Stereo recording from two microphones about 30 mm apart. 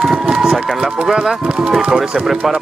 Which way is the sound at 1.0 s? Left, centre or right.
Centre.